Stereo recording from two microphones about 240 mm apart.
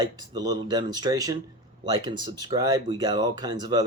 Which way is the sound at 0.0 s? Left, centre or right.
Centre.